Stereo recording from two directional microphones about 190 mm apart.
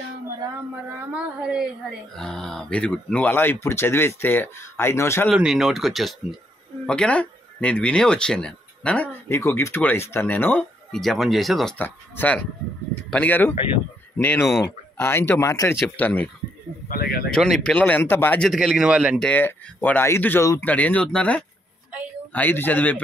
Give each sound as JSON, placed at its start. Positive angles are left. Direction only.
{"t": 1.1, "sound": "speech", "side_deg": -5}
{"t": 5.3, "sound": "speech", "side_deg": 0}
{"t": 16.9, "sound": "speech", "side_deg": 55}
{"t": 17.3, "sound": "speech", "side_deg": 0}